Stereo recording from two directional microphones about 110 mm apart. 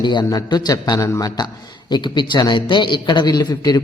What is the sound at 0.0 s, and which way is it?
A man's voice, 40° left (ahead or behind).